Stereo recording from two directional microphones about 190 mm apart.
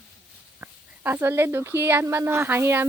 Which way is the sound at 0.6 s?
10° right (ahead or behind).